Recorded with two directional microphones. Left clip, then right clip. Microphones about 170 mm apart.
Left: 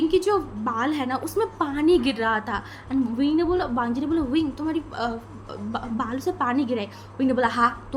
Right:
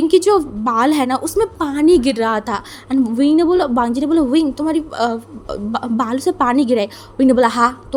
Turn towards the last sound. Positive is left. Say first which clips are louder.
# right 8 dB
turn(degrees=-55)  # may be behind; listen again after turning